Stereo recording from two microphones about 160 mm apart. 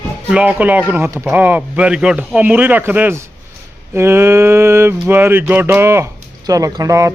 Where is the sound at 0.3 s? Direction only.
5° right (ahead or behind).